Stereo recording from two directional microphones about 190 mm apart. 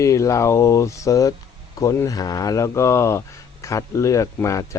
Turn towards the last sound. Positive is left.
turn(degrees=15)  # may be behind; listen again after turning